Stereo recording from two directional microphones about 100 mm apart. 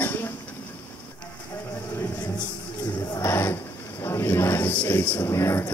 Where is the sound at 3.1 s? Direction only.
30° left (ahead or behind).